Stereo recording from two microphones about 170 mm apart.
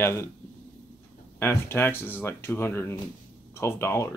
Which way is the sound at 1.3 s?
15° left (ahead or behind).